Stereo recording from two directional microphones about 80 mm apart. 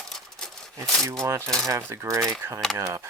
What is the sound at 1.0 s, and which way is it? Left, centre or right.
Speech, right.